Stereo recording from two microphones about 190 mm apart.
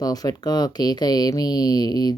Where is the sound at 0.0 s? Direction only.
20° left (ahead or behind).